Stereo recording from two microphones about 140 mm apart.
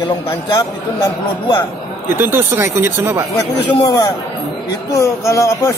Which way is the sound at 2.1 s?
15° right (ahead or behind).